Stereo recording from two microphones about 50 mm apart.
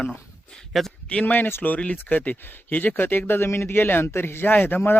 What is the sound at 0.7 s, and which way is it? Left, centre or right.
Speech, centre.